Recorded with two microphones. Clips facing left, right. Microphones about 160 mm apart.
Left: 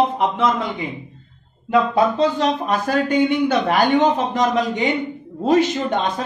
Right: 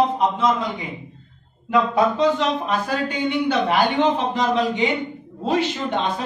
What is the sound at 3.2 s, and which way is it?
A man's voice, 45° left (ahead or behind).